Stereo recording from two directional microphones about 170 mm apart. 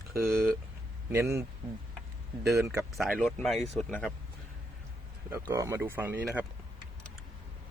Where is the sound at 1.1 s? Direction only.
15° right (ahead or behind).